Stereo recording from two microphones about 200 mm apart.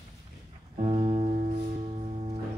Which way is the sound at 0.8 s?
25° right (ahead or behind).